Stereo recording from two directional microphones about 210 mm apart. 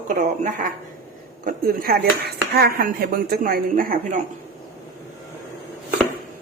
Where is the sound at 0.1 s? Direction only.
35° right (ahead or behind).